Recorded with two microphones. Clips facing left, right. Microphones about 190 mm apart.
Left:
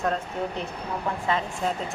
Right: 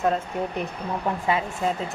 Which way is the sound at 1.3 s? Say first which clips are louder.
Right 2 dB; 10° right (ahead or behind).